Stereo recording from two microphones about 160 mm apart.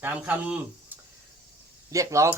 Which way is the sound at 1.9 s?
20° right (ahead or behind).